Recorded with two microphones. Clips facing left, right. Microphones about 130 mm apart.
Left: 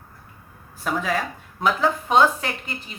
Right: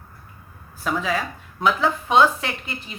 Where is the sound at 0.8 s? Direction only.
50° left (ahead or behind).